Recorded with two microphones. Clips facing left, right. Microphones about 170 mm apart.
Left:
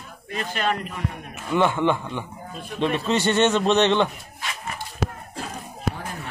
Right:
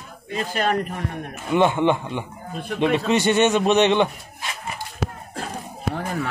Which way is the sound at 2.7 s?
15° right (ahead or behind).